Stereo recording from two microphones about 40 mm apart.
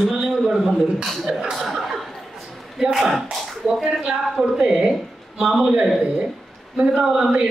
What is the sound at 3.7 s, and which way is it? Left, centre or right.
A man's voice, centre.